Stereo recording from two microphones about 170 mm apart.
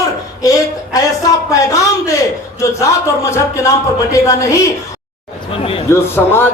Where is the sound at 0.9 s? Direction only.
20° left (ahead or behind).